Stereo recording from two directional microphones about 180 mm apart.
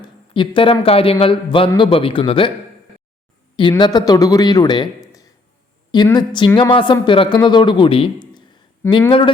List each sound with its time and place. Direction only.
0.0 s speech: 30° left (ahead or behind)
3.6 s speech: 25° left (ahead or behind)